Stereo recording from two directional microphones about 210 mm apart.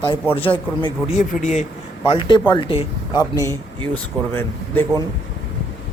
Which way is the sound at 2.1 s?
25° left (ahead or behind).